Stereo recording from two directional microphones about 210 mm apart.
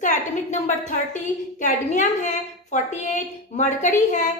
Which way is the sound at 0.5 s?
35° left (ahead or behind).